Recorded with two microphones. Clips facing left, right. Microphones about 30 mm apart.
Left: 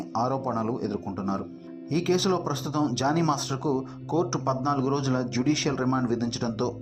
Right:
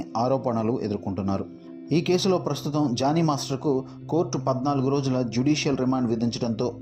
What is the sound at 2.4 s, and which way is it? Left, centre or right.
Speech, right.